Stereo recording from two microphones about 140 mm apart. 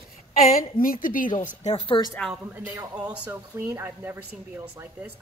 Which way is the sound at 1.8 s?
35° left (ahead or behind).